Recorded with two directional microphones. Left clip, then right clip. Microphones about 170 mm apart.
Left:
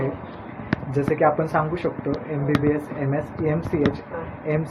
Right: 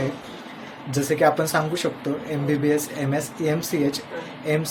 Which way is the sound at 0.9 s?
15° right (ahead or behind).